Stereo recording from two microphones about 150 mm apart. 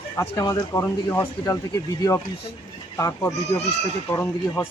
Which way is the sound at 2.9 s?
20° left (ahead or behind).